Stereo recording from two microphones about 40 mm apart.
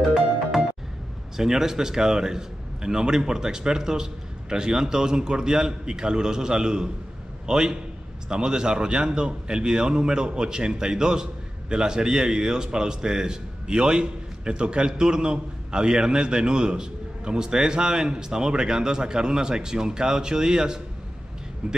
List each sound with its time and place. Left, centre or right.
0.0 s music: centre
1.3 s a man's voice: centre